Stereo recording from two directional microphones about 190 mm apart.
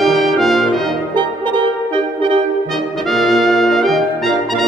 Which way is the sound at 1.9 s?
30° right (ahead or behind).